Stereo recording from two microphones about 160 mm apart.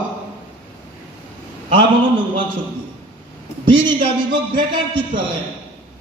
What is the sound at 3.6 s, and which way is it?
A woman's voice, 30° right (ahead or behind).